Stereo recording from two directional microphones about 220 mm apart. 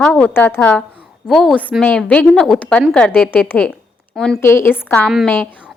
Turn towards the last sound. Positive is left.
turn(degrees=0)  # may be behind; listen again after turning